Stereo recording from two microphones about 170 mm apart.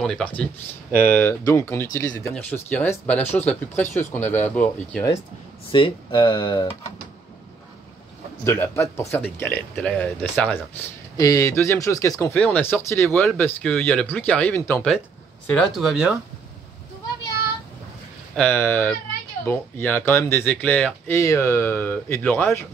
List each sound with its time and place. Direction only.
0.0 s speech: 5° left (ahead or behind)
5.7 s speech: 30° left (ahead or behind)
8.5 s speech: 15° left (ahead or behind); by 16.2 s 5° right (ahead or behind)
18.3 s speech: 10° left (ahead or behind)